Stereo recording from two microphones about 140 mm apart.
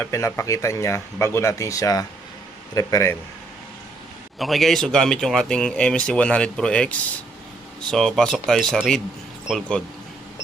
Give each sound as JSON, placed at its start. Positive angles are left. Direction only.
{"t": 0.0, "sound": "speech", "side_deg": 20}
{"t": 4.4, "sound": "speech", "side_deg": 0}